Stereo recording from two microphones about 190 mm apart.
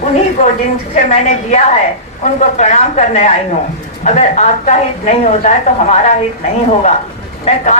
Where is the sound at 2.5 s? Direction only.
35° left (ahead or behind).